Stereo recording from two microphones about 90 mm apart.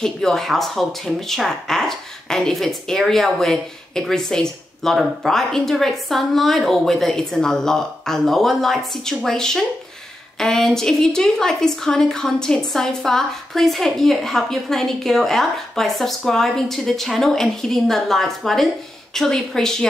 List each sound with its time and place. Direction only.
0.0 s speech: 5° left (ahead or behind)